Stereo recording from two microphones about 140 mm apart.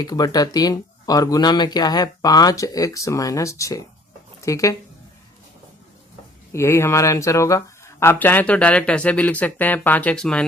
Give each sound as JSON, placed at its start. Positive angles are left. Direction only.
{"t": 0.0, "sound": "speech", "side_deg": 25}
{"t": 6.5, "sound": "speech", "side_deg": 20}